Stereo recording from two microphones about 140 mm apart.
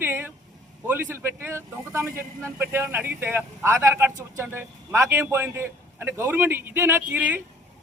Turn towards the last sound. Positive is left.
turn(degrees=-10)  # may be behind; listen again after turning